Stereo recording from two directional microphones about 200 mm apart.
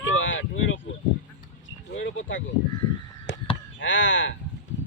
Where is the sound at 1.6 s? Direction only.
70° left (ahead or behind).